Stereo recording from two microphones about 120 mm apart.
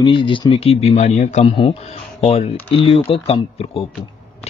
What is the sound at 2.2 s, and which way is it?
Speech, 50° left (ahead or behind).